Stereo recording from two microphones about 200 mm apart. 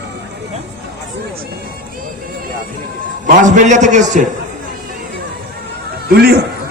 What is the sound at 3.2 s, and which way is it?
Speech, 40° right (ahead or behind).